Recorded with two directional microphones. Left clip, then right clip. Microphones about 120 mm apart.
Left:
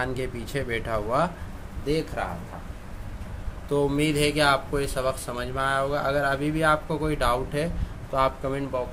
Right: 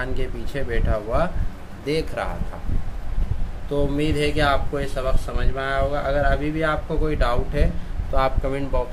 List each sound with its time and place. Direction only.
0.0 s speech: 40° left (ahead or behind)
1.9 s speech: 10° left (ahead or behind)
3.7 s speech: 45° left (ahead or behind); by 8.8 s 15° left (ahead or behind)